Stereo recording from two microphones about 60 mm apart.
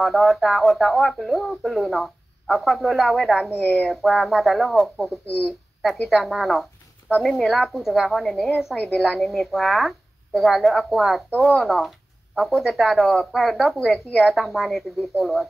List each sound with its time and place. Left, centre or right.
0.0 s speech: centre
3.5 s speech: left
3.9 s speech: centre
13.7 s a woman's voice: centre
14.2 s speech: centre